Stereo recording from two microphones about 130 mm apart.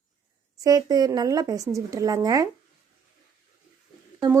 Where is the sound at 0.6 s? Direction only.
30° right (ahead or behind).